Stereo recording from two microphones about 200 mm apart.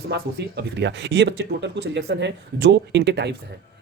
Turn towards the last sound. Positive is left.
turn(degrees=-55)  # may be behind; listen again after turning